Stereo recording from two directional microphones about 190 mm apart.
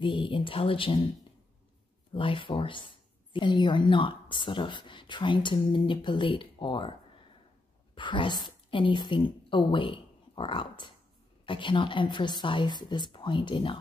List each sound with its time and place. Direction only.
0.0 s speech: 25° left (ahead or behind)
2.1 s a woman's voice: 25° left (ahead or behind)